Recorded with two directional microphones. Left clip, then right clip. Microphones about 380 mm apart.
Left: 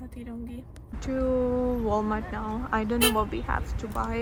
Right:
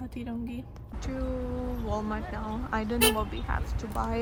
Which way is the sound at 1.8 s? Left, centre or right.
Centre.